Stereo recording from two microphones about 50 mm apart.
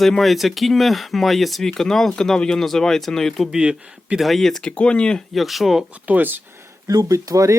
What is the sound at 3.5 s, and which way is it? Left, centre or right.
Speech, centre.